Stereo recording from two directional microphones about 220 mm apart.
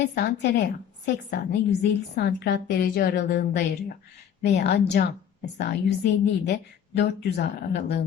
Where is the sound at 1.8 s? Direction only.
50° left (ahead or behind).